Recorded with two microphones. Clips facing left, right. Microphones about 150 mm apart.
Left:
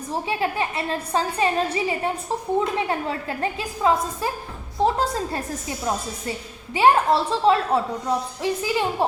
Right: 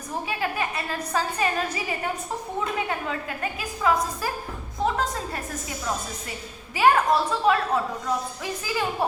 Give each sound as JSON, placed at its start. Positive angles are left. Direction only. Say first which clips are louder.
{"t": 0.1, "sound": "a woman's voice", "louder": "left 4 dB", "side_deg": 25}